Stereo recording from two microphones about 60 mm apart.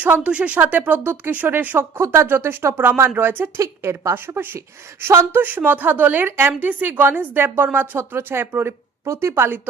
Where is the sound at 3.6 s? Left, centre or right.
Right.